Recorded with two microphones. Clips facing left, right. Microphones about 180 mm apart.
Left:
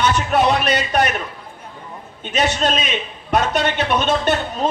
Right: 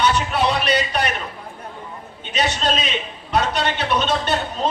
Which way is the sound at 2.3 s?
50° left (ahead or behind).